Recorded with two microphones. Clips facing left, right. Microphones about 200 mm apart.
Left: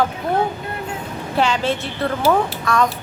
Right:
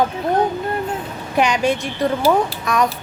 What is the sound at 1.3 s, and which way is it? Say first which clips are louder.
A woman's voice: right 2 dB; 15° right (ahead or behind).